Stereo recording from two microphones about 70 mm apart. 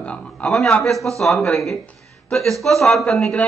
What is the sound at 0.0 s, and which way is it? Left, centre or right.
Speech, centre.